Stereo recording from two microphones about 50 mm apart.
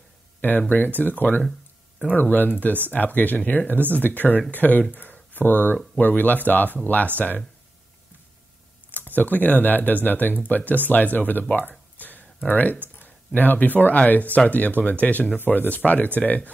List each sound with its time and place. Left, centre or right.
0.6 s speech: left
5.1 s a sound: left
5.9 s speech: left
8.9 s speech: left
12.0 s a sound: left
12.4 s speech: left